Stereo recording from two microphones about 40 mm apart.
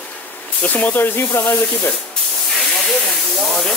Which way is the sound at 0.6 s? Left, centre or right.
Left.